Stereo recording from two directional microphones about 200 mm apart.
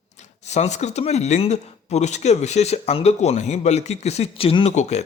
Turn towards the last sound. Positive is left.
turn(degrees=35)  # may be behind; listen again after turning